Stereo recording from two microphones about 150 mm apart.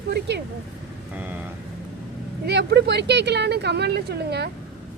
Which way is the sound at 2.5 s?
90° right.